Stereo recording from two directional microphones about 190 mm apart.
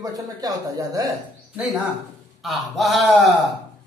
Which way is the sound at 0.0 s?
20° right (ahead or behind).